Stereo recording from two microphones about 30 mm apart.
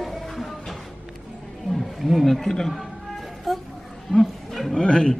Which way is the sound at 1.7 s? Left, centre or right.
Centre.